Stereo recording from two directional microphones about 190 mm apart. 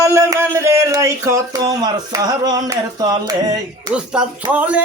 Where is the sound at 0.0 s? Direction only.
15° right (ahead or behind).